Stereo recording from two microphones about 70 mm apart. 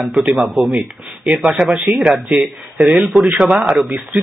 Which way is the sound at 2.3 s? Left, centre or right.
Centre.